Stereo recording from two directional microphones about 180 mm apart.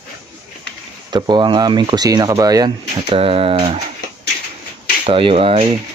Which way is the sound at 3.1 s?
30° right (ahead or behind).